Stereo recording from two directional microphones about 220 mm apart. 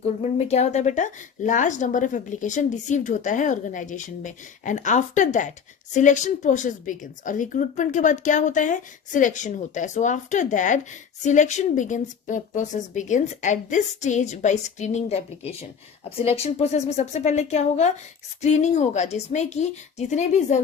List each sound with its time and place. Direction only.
0.0 s speech: 30° left (ahead or behind)